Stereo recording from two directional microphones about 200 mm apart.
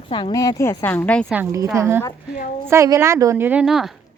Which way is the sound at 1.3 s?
15° right (ahead or behind).